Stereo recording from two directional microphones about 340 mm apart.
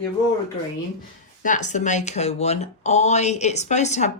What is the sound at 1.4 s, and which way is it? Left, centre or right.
Speech, left.